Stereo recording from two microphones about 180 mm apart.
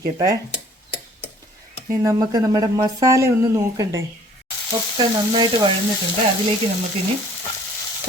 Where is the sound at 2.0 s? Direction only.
15° right (ahead or behind).